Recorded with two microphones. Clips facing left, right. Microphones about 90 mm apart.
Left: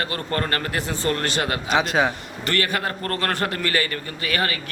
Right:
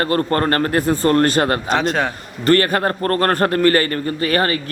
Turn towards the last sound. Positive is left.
turn(degrees=-40)  # may be behind; listen again after turning